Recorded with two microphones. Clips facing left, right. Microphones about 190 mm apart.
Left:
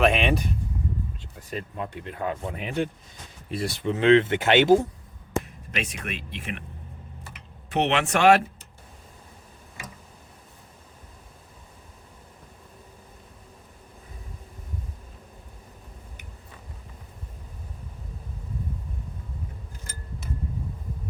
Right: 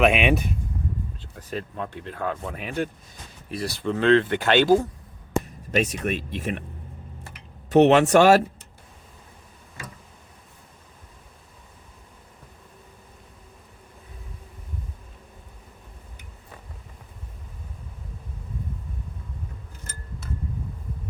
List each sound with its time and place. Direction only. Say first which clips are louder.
0.0 s speech: right 2 dB; 5° right (ahead or behind)
1.5 s speech: right 1 dB; 5° left (ahead or behind)
5.7 s speech: right 9 dB; 40° right (ahead or behind)
7.7 s speech: right 9 dB; 40° right (ahead or behind)